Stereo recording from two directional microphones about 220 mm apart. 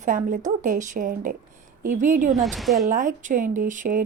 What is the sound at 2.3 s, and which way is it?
Speech, centre (ahead or behind).